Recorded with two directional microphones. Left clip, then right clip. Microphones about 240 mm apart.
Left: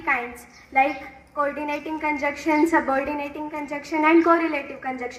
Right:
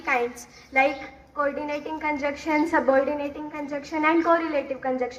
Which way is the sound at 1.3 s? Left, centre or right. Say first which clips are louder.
Left 1 dB; left.